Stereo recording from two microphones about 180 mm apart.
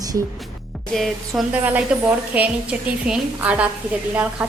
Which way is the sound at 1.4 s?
10° right (ahead or behind).